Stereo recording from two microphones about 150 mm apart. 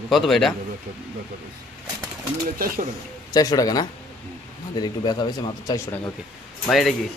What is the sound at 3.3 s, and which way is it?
Speech, 25° left (ahead or behind).